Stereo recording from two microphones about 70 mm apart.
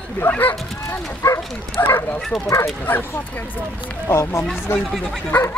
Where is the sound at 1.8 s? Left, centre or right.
Left.